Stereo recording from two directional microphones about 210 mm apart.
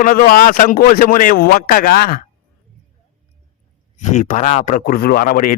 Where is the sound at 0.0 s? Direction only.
40° left (ahead or behind).